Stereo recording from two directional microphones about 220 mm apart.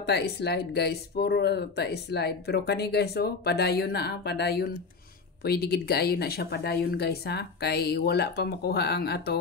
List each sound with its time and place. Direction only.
0.0 s speech: 50° left (ahead or behind)